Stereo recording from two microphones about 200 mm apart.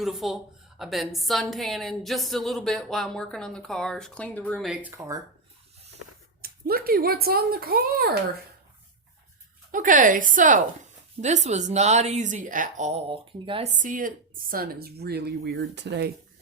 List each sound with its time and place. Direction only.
0.0 s a woman's voice: centre (ahead or behind); by 5.2 s 15° right (ahead or behind)
6.4 s speech: 50° right (ahead or behind)
9.7 s speech: 40° right (ahead or behind); by 16.1 s 55° right (ahead or behind)